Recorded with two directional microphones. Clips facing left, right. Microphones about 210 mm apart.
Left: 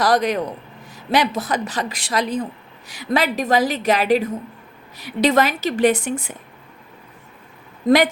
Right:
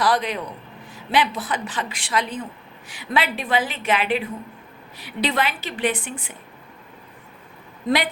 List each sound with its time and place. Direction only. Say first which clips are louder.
0.0 s a man's voice: left 4 dB; 45° left (ahead or behind)
7.9 s a woman's voice: left 7 dB; 45° left (ahead or behind)